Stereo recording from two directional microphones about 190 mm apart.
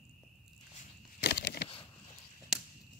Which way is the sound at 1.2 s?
65° left (ahead or behind).